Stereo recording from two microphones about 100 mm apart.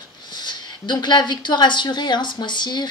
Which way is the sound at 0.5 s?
50° left (ahead or behind).